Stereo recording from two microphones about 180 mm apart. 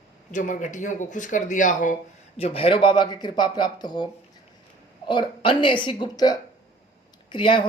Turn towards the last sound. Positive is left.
turn(degrees=25)  # may be behind; listen again after turning